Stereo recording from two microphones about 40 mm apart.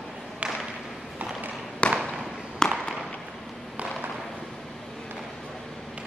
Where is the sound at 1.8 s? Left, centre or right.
Left.